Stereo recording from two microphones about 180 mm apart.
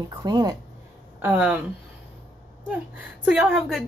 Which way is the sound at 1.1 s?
10° right (ahead or behind).